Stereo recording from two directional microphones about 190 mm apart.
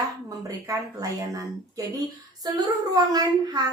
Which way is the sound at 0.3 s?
20° right (ahead or behind).